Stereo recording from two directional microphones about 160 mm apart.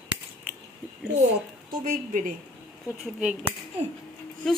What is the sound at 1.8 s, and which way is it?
Speech, 55° right (ahead or behind).